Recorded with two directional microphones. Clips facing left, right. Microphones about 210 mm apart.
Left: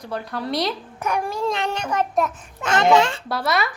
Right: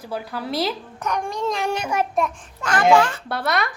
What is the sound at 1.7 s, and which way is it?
Speech, 10° right (ahead or behind).